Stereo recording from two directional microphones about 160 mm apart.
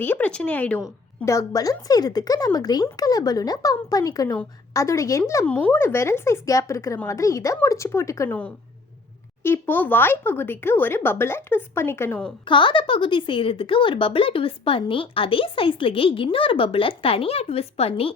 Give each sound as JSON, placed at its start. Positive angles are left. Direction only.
{"t": 0.0, "sound": "speech", "side_deg": 10}
{"t": 5.5, "sound": "speech", "side_deg": 10}
{"t": 12.5, "sound": "a woman's voice", "side_deg": 30}